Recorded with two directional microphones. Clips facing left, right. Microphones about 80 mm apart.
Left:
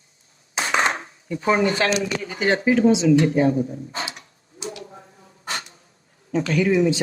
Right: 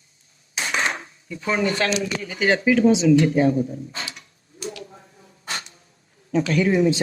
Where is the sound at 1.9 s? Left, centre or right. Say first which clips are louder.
Left 1 dB; left.